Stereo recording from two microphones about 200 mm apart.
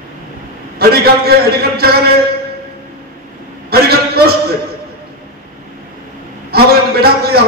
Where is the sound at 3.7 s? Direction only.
50° right (ahead or behind).